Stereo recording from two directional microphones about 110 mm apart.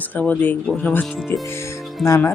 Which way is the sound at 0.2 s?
15° left (ahead or behind).